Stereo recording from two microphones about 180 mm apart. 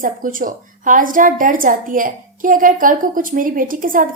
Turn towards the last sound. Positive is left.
turn(degrees=-50)  # may be behind; listen again after turning